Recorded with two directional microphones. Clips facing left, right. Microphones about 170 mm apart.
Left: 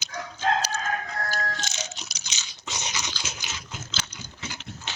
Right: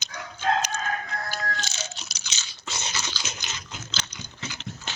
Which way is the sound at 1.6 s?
20° left (ahead or behind).